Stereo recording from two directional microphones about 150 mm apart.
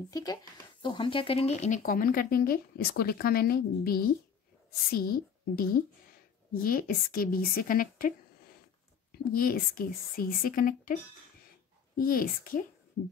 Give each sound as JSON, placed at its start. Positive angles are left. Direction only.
{"t": 0.1, "sound": "speech", "side_deg": 25}
{"t": 1.8, "sound": "speech", "side_deg": 70}
{"t": 4.9, "sound": "a woman's voice", "side_deg": 75}
{"t": 9.3, "sound": "a woman's voice", "side_deg": 75}
{"t": 12.0, "sound": "a woman's voice", "side_deg": 70}